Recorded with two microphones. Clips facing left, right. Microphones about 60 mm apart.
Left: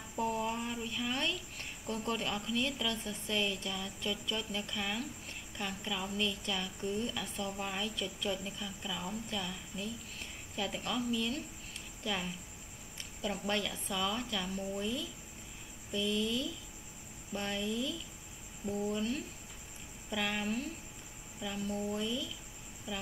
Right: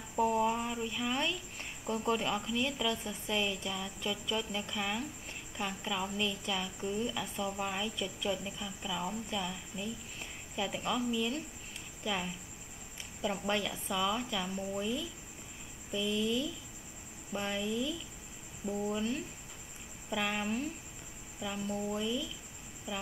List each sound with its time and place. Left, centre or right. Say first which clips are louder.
0.1 s a woman's voice: right 5 dB; centre
21.8 s a woman's voice: right 1 dB; centre